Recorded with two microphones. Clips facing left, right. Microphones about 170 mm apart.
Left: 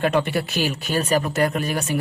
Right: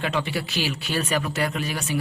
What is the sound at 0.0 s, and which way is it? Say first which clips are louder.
Speech: left 6 dB; 50° left (ahead or behind).